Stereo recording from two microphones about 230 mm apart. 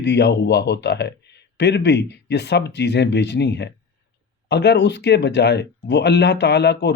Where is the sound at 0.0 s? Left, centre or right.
Left.